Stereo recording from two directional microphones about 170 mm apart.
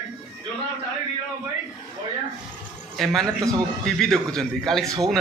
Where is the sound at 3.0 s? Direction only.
Centre (ahead or behind).